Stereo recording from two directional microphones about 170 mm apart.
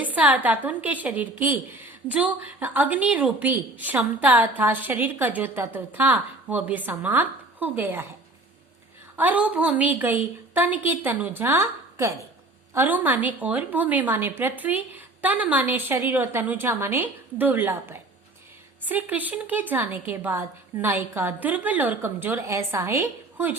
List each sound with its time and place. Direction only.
0.0 s a woman's voice: 10° right (ahead or behind)
9.1 s a woman's voice: 10° right (ahead or behind)